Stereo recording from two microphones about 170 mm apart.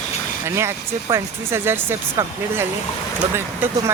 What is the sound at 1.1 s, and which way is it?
Speech, 15° right (ahead or behind).